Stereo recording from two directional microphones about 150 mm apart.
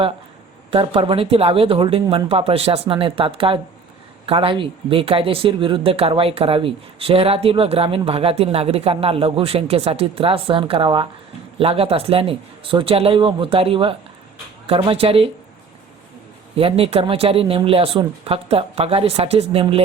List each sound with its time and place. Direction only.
0.7 s speech: 35° right (ahead or behind)
16.6 s speech: 40° right (ahead or behind)